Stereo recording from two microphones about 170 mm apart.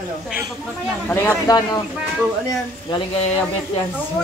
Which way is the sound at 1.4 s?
20° left (ahead or behind).